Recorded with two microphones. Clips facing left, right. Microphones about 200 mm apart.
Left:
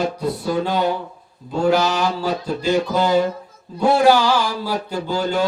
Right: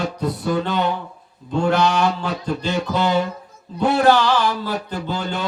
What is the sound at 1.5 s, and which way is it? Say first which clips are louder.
Mantra: even; 5° left (ahead or behind).